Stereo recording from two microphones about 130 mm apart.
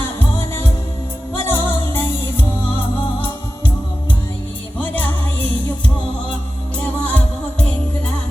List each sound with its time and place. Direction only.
1.5 s music: 15° left (ahead or behind)
4.8 s music: 15° left (ahead or behind)
6.7 s music: 10° left (ahead or behind)